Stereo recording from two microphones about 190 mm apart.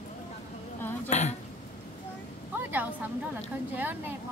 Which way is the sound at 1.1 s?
40° left (ahead or behind).